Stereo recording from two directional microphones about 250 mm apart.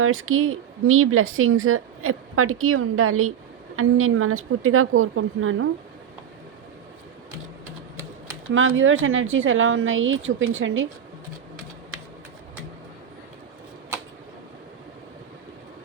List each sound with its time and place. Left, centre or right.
0.0 s speech: right
8.5 s a woman's voice: right